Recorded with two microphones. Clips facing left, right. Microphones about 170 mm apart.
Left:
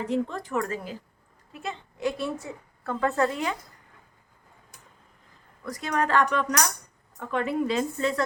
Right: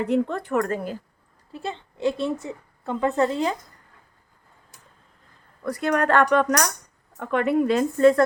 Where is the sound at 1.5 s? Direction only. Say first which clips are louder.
Right 4 dB; 30° right (ahead or behind).